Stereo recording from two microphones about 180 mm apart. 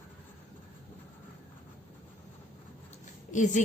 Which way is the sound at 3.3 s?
45° left (ahead or behind).